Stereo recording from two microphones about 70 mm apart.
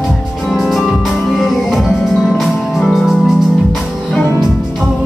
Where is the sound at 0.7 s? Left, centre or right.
Centre.